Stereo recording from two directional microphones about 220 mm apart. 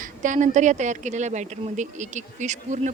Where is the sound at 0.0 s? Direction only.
35° right (ahead or behind).